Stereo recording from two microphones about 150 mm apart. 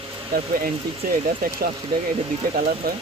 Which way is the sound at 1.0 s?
70° right (ahead or behind).